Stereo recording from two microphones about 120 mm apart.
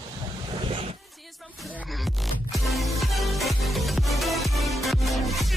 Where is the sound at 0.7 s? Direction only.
55° right (ahead or behind).